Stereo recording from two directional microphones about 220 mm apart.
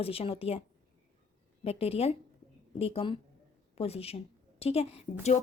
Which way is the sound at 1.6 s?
25° left (ahead or behind).